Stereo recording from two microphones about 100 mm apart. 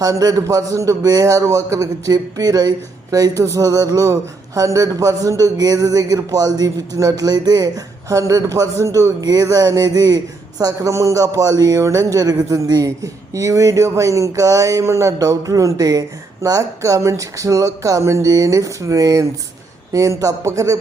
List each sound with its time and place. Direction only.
0.0 s speech: 35° right (ahead or behind)